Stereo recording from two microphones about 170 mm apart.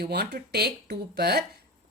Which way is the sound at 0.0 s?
70° right (ahead or behind).